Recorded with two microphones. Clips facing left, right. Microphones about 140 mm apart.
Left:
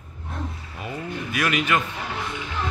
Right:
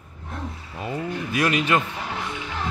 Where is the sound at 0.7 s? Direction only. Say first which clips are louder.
Right 4 dB; 25° right (ahead or behind).